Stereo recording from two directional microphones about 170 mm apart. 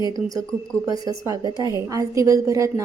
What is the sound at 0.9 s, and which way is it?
Speech, 20° right (ahead or behind).